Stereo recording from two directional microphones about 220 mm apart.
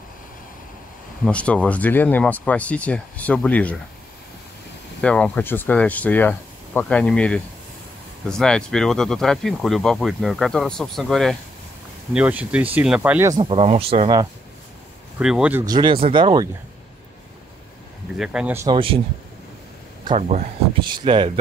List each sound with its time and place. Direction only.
1.2 s speech: 5° left (ahead or behind)
5.0 s speech: 5° left (ahead or behind); by 14.2 s 25° right (ahead or behind)
15.1 s speech: 5° right (ahead or behind)
15.6 s speech: 20° right (ahead or behind)
18.1 s speech: 5° right (ahead or behind)
20.1 s speech: 30° right (ahead or behind)